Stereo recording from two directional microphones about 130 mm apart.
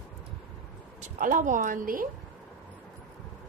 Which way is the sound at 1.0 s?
90° right.